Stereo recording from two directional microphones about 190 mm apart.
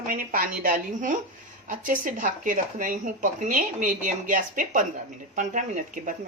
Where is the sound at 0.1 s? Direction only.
45° right (ahead or behind).